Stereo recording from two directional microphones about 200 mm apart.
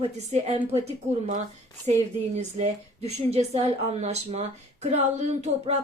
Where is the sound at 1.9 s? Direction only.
30° right (ahead or behind).